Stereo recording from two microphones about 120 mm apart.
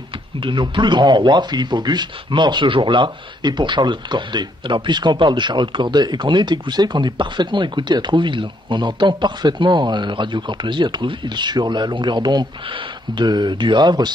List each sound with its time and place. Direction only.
0.4 s speech: 40° right (ahead or behind)